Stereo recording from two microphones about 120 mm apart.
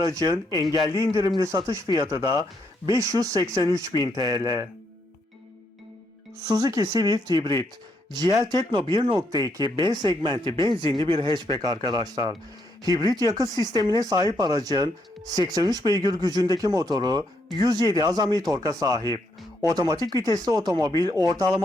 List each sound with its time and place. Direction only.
0.0 s speech: 35° right (ahead or behind)
3.9 s speech: 35° left (ahead or behind)
4.2 s speech: 30° right (ahead or behind)
6.5 s speech: 30° right (ahead or behind)
9.5 s speech: 30° right (ahead or behind)